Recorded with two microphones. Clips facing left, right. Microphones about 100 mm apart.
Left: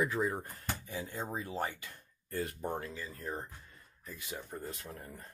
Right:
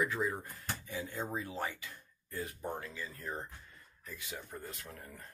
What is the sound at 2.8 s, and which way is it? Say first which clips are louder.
Speech: left 1 dB; 35° left (ahead or behind).